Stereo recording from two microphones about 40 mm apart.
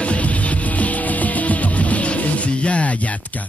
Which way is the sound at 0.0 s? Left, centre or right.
Left.